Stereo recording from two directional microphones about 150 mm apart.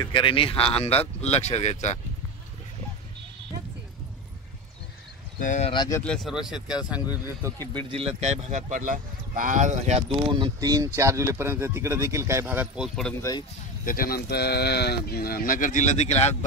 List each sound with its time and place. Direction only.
0.1 s speech: 35° left (ahead or behind)
5.4 s speech: 55° left (ahead or behind)
6.0 s speech: centre (ahead or behind)
7.4 s a man's voice: 25° right (ahead or behind)
7.9 s speech: 40° right (ahead or behind); by 13.1 s centre (ahead or behind)
13.8 s speech: 75° left (ahead or behind); by 16.3 s 50° left (ahead or behind)